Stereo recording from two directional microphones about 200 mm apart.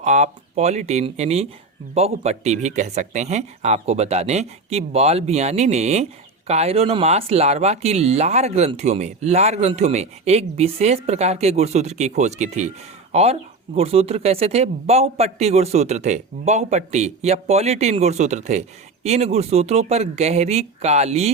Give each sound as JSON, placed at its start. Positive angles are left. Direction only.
{"t": 0.0, "sound": "speech", "side_deg": -35}
{"t": 13.7, "sound": "speech", "side_deg": -30}